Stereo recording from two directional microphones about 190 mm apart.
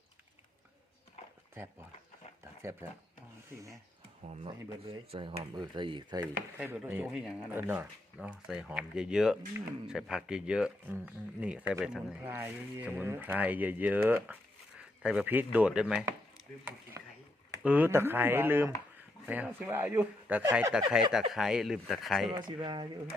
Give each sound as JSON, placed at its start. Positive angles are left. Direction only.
{"t": 2.4, "sound": "a sound", "side_deg": -15}
{"t": 4.3, "sound": "speech", "side_deg": -30}
{"t": 6.6, "sound": "speech", "side_deg": -10}
{"t": 17.6, "sound": "speech", "side_deg": -10}
{"t": 22.4, "sound": "speech", "side_deg": -20}